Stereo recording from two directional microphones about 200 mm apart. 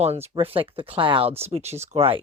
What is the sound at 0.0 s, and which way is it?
Speech, 30° right (ahead or behind).